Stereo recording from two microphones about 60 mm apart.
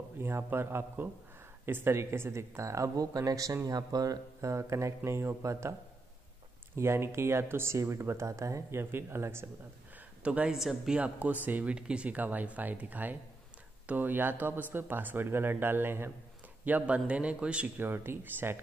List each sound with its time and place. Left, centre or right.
0.2 s speech: right
3.6 s speech: right
7.7 s speech: right
8.9 s speech: right
10.2 s speech: right
10.5 s speech: centre
11.0 s speech: right
16.6 s speech: right
17.7 s speech: right